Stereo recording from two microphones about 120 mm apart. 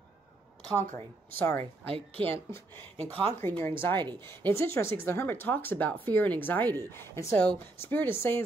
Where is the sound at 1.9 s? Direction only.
50° right (ahead or behind).